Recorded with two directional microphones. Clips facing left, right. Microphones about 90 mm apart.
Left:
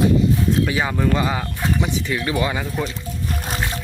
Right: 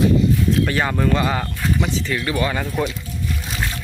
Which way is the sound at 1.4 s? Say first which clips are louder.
Even; 20° left (ahead or behind).